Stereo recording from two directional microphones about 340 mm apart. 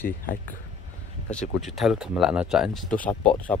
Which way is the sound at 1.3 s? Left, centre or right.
Centre.